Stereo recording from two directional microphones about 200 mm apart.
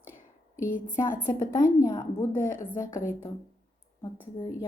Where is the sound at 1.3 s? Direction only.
20° left (ahead or behind).